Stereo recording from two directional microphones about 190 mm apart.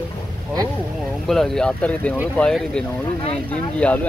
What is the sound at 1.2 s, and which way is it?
Speech, centre (ahead or behind).